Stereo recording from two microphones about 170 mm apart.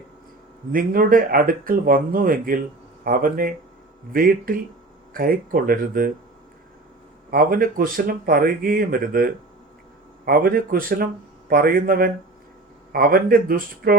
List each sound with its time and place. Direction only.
0.7 s speech: 55° right (ahead or behind)
7.3 s speech: 60° right (ahead or behind)